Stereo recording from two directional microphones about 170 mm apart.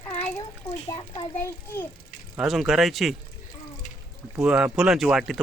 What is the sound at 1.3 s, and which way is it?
Speech, 15° left (ahead or behind).